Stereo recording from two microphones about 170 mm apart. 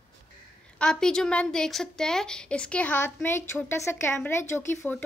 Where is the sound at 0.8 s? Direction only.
5° left (ahead or behind).